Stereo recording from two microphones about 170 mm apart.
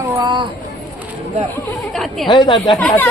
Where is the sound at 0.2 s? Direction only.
25° right (ahead or behind).